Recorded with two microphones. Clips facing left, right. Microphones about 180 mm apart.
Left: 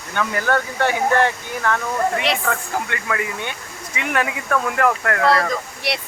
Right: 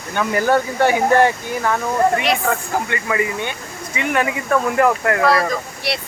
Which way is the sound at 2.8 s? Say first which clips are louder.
Right 4 dB; 5° right (ahead or behind).